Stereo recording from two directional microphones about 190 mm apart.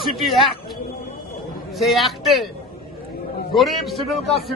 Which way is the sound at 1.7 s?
Centre (ahead or behind).